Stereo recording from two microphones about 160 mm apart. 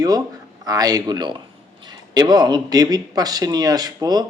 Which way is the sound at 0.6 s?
25° right (ahead or behind).